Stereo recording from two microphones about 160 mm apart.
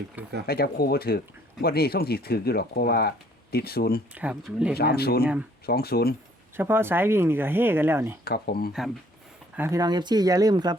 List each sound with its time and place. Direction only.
0.4 s speech: 75° left (ahead or behind)
4.1 s speech: 10° right (ahead or behind)
4.8 s speech: 75° left (ahead or behind)
5.2 s speech: 10° right (ahead or behind)
5.6 s speech: 75° left (ahead or behind)
6.6 s speech: 15° right (ahead or behind)
8.2 s speech: 75° left (ahead or behind)
9.6 s speech: 20° right (ahead or behind)